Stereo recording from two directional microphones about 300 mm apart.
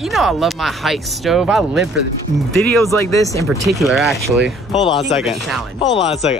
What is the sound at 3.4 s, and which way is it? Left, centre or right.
Speech, centre.